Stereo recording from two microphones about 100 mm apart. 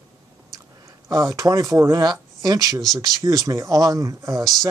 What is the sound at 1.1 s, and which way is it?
Speech, 35° right (ahead or behind).